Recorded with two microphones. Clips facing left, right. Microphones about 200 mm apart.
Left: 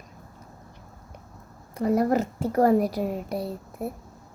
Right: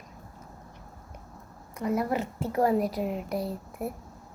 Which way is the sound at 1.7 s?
35° left (ahead or behind).